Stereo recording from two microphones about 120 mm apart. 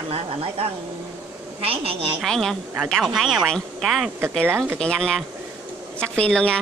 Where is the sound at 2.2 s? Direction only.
5° left (ahead or behind).